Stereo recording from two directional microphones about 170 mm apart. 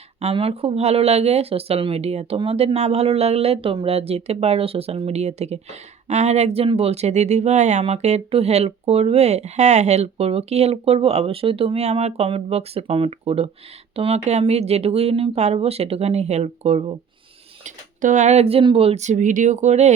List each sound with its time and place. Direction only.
0.2 s speech: 35° right (ahead or behind)
17.6 s speech: 45° right (ahead or behind)